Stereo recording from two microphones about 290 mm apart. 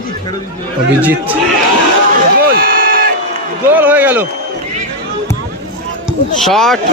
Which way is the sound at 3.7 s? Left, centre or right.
Centre.